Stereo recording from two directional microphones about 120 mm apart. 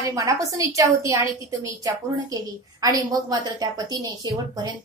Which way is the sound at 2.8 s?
30° right (ahead or behind).